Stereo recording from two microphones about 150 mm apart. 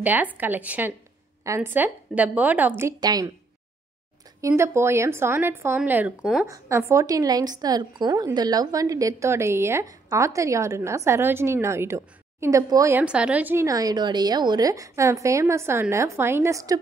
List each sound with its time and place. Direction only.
0.0 s a woman's voice: 10° right (ahead or behind)
2.8 s a woman's voice: 25° right (ahead or behind)
4.4 s a woman's voice: 20° right (ahead or behind)
13.0 s a woman's voice: 5° right (ahead or behind)